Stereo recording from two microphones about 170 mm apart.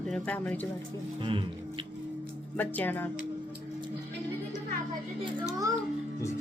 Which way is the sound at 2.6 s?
10° left (ahead or behind).